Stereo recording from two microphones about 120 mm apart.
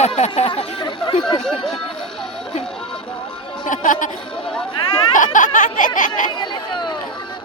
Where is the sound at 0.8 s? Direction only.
40° left (ahead or behind).